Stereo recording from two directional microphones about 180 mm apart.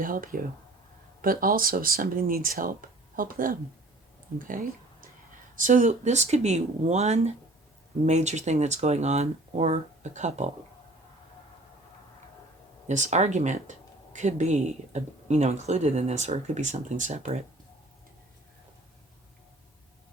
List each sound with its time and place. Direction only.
0.0 s speech: 50° right (ahead or behind)
12.9 s speech: 40° right (ahead or behind)